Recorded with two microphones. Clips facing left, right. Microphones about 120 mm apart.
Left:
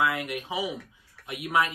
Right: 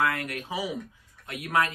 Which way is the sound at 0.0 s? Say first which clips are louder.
Left 1 dB; 20° left (ahead or behind).